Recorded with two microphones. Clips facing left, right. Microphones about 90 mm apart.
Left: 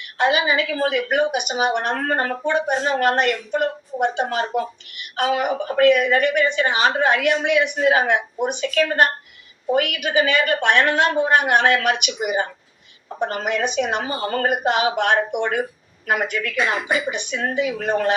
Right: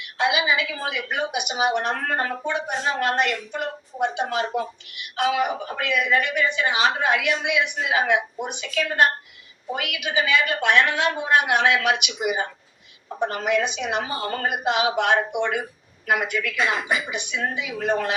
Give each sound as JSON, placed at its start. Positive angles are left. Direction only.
{"t": 0.0, "sound": "a woman's voice", "side_deg": 50}